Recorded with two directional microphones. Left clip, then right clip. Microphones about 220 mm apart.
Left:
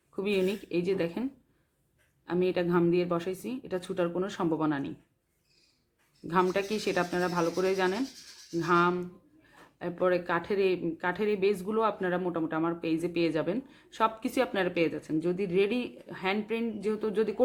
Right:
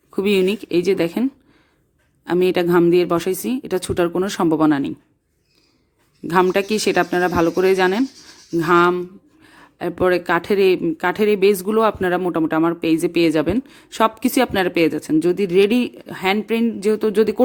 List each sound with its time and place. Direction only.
0.2 s speech: 40° right (ahead or behind)
6.2 s speech: 40° right (ahead or behind)